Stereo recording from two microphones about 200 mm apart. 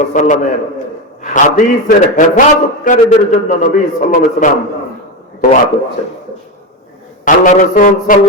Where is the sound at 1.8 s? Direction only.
40° left (ahead or behind).